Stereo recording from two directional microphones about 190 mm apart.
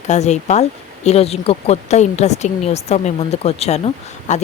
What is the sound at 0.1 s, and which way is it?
Speech, 35° left (ahead or behind).